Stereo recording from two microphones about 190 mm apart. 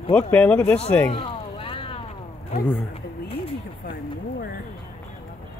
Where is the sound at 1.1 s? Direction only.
30° left (ahead or behind).